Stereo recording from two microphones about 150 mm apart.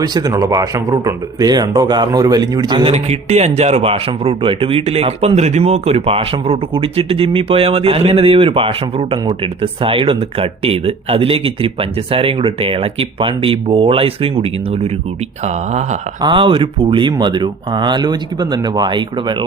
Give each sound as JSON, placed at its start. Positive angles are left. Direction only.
{"t": 0.0, "sound": "speech", "side_deg": -25}
{"t": 2.9, "sound": "speech", "side_deg": -45}
{"t": 16.2, "sound": "speech", "side_deg": -35}